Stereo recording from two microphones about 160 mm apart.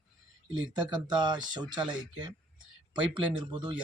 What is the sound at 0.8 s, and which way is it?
Speech, 25° right (ahead or behind).